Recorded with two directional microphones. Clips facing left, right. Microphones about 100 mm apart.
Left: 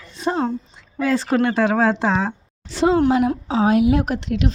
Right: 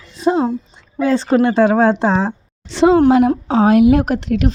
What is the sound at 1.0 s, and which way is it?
Speech, 30° right (ahead or behind).